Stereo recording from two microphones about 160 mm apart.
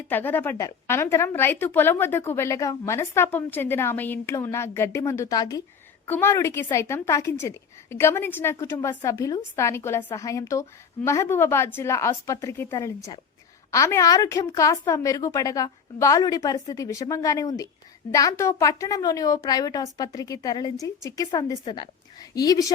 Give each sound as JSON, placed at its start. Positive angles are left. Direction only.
{"t": 0.1, "sound": "a woman's voice", "side_deg": 10}